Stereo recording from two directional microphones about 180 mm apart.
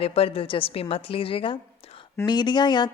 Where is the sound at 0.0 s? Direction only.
35° left (ahead or behind).